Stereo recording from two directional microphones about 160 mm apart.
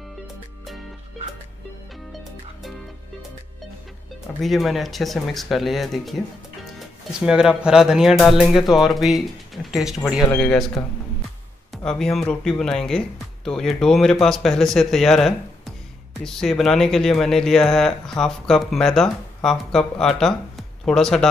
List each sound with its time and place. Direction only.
4.4 s speech: centre (ahead or behind)
11.7 s speech: 5° left (ahead or behind)